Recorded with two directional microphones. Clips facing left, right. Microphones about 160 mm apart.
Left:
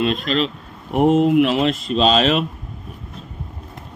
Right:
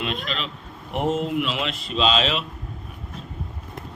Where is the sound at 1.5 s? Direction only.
40° left (ahead or behind).